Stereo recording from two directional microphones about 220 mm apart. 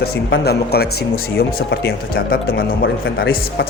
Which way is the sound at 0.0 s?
45° left (ahead or behind).